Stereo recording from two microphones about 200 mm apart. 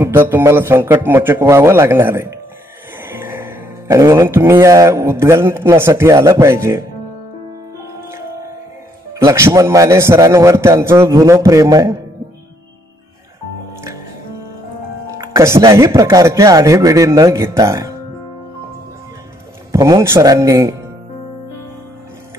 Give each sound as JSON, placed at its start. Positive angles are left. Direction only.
{"t": 0.0, "sound": "a man's voice", "side_deg": -10}
{"t": 9.1, "sound": "a man's voice", "side_deg": -15}
{"t": 15.0, "sound": "a man's voice", "side_deg": -15}
{"t": 19.7, "sound": "a man's voice", "side_deg": -15}